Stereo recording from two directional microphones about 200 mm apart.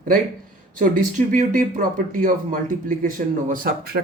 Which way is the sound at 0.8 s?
40° right (ahead or behind).